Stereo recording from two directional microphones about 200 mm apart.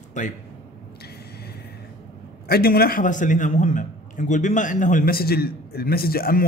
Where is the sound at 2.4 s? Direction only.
50° left (ahead or behind).